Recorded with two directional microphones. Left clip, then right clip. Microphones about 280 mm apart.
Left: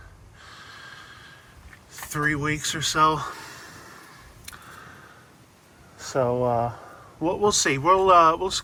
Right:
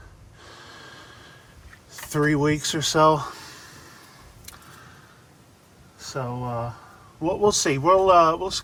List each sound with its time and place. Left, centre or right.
0.4 s a sound: right
1.9 s speech: right; by 3.9 s centre
6.0 s speech: centre
7.2 s speech: centre